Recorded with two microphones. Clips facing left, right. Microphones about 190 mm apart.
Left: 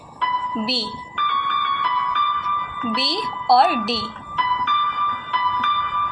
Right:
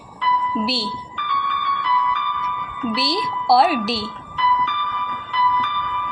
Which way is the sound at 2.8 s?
Centre (ahead or behind).